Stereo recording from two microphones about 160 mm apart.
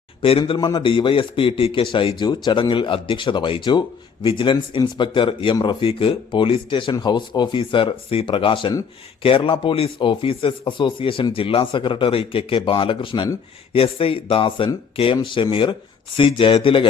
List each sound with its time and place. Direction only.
0.2 s a man's voice: 35° left (ahead or behind)